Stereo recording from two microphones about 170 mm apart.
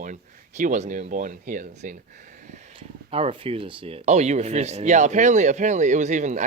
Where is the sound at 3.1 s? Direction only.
35° right (ahead or behind).